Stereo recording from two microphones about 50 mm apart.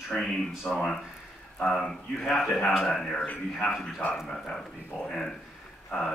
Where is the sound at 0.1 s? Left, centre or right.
Centre.